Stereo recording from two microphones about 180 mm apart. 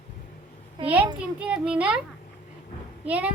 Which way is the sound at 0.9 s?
5° right (ahead or behind).